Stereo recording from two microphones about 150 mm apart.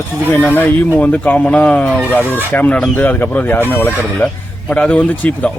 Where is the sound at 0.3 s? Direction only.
10° left (ahead or behind).